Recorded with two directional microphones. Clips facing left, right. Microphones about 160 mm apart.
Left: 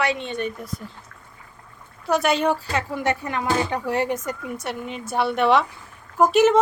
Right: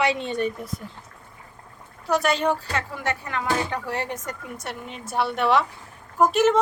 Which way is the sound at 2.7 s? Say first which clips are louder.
Left 4 dB; 15° left (ahead or behind).